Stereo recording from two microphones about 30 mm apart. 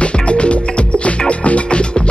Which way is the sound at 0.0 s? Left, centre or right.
Left.